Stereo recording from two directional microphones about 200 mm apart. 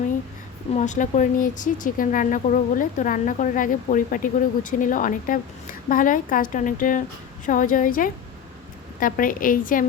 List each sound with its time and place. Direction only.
0.7 s a woman's voice: 35° left (ahead or behind)